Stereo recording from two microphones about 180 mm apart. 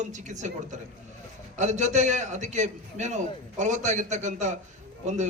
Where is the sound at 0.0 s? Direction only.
40° right (ahead or behind).